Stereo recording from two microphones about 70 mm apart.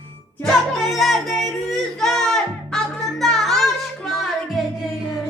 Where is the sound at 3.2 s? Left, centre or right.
Centre.